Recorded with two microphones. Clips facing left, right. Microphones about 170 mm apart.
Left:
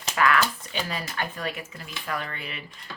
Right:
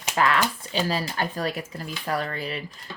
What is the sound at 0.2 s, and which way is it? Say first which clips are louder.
Speech: even; 30° right (ahead or behind).